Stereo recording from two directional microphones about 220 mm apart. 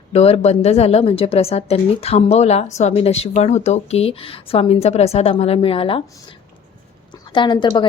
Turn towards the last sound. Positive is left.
turn(degrees=20)  # may be behind; listen again after turning